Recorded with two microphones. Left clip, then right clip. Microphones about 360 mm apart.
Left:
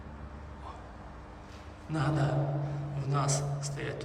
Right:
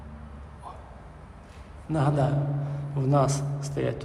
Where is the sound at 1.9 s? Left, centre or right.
Centre.